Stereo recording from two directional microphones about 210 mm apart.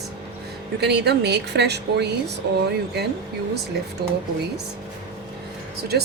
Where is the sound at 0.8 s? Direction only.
50° right (ahead or behind).